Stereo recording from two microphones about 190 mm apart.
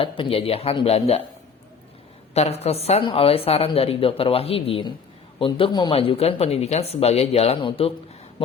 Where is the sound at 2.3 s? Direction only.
35° left (ahead or behind).